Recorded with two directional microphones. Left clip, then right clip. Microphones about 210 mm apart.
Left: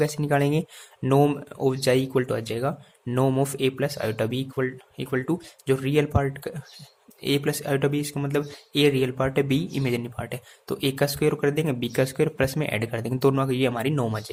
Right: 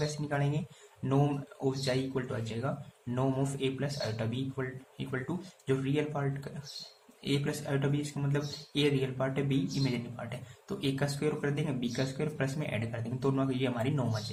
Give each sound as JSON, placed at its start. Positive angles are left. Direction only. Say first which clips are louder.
{"t": 0.0, "sound": "speech", "louder": "left 11 dB", "side_deg": 55}